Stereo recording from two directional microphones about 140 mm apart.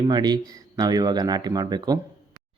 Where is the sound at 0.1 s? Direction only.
30° right (ahead or behind).